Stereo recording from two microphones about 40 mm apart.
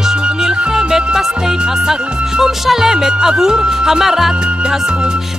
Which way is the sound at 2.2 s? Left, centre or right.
Centre.